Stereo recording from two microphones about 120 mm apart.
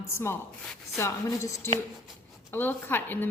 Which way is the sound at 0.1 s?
20° left (ahead or behind).